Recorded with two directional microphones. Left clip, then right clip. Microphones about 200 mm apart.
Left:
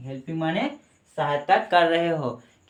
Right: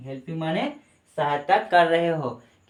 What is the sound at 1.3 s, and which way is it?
Speech, 25° left (ahead or behind).